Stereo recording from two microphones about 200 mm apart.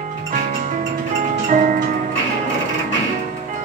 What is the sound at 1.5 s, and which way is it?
Tick-tock, 40° right (ahead or behind).